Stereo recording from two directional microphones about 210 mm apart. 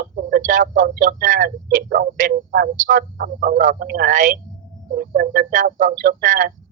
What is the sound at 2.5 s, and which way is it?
Speech, 45° right (ahead or behind).